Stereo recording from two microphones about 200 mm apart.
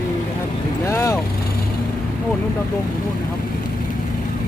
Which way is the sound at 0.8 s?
15° left (ahead or behind).